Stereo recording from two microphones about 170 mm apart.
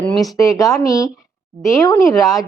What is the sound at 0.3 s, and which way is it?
A woman's voice, 20° left (ahead or behind).